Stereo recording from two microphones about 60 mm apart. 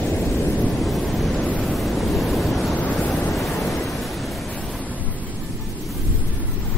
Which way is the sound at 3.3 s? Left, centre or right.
Centre.